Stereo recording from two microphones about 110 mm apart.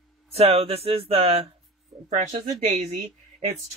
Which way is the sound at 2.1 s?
90° right.